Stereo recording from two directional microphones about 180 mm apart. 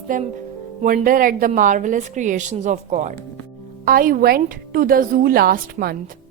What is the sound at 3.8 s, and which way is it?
A woman's voice, 50° right (ahead or behind).